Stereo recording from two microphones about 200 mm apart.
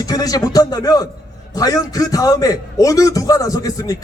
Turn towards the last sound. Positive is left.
turn(degrees=15)  # may be behind; listen again after turning